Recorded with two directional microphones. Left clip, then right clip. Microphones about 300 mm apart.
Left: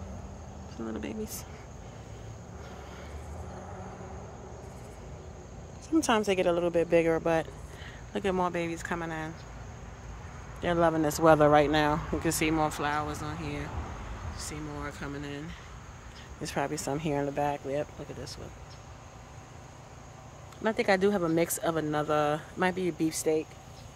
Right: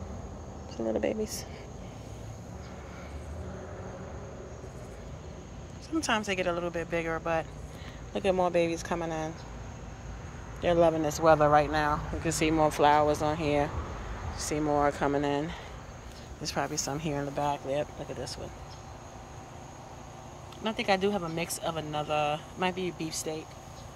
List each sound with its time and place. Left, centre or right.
1.0 s speech: centre
5.9 s speech: centre
8.1 s speech: centre
10.6 s speech: centre
12.3 s speech: centre
16.4 s speech: centre
20.6 s speech: centre